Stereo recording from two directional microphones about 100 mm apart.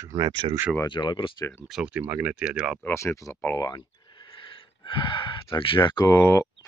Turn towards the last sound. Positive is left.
turn(degrees=35)  # may be behind; listen again after turning